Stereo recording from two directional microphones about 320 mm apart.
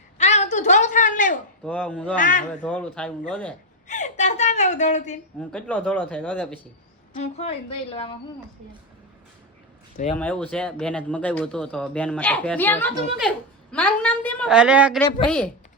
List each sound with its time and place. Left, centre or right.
0.2 s a sound: left
1.6 s speech: centre
2.1 s speech: left
2.6 s speech: centre
3.8 s a sound: left
5.4 s speech: centre
7.1 s a woman's voice: centre
10.2 s a woman's voice: centre